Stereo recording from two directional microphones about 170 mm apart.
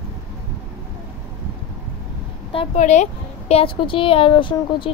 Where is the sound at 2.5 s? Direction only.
45° left (ahead or behind).